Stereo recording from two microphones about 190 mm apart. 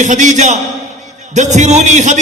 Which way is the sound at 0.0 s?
40° right (ahead or behind).